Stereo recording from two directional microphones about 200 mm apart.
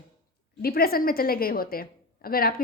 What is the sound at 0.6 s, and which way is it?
A woman's voice, 50° left (ahead or behind).